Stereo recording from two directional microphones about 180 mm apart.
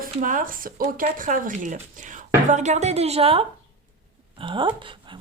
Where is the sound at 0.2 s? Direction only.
45° right (ahead or behind).